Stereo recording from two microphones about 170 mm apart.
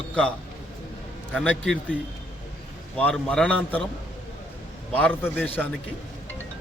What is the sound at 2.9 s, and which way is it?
Speech, 5° left (ahead or behind).